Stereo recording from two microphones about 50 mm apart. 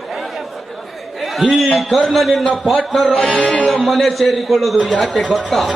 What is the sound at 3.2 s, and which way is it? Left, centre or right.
Music, left.